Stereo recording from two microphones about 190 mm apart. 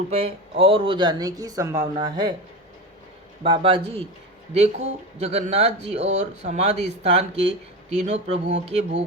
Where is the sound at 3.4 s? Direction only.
25° right (ahead or behind).